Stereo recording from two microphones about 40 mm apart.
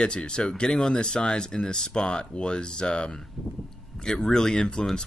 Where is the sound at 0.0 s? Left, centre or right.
Left.